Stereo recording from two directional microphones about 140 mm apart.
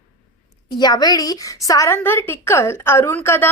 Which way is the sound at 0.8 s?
30° left (ahead or behind).